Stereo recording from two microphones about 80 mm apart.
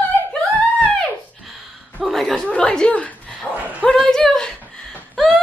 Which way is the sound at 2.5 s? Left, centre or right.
Centre.